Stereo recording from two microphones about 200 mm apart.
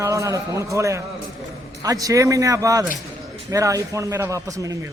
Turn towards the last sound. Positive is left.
turn(degrees=-15)  # may be behind; listen again after turning